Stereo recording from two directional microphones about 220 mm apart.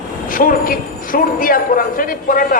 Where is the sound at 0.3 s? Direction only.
40° left (ahead or behind).